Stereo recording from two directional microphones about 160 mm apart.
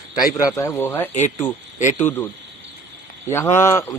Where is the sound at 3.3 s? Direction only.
15° left (ahead or behind).